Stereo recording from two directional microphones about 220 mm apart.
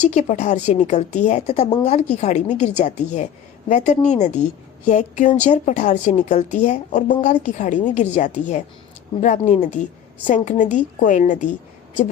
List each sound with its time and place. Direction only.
0.1 s speech: 35° left (ahead or behind)